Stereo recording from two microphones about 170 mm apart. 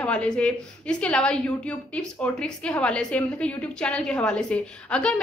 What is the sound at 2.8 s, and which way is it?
A woman's voice, 5° left (ahead or behind).